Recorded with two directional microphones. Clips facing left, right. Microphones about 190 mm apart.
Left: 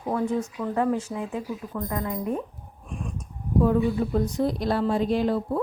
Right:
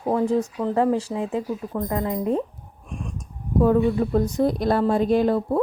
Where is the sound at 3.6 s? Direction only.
50° right (ahead or behind).